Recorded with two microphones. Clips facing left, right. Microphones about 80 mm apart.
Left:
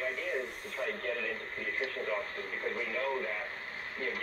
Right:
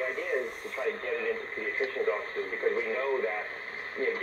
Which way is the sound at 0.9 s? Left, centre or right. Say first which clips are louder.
Right 7 dB; right.